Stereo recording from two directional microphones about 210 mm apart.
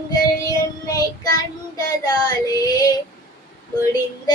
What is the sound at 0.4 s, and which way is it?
Child singing, 15° left (ahead or behind).